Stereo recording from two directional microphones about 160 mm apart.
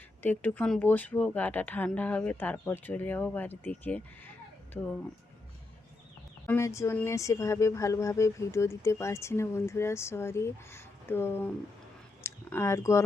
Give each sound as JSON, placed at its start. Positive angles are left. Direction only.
{"t": 0.2, "sound": "speech", "side_deg": 10}
{"t": 6.4, "sound": "speech", "side_deg": 15}
{"t": 12.2, "sound": "a sound", "side_deg": 15}